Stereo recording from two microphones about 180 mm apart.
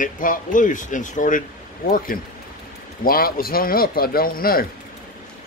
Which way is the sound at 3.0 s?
55° left (ahead or behind).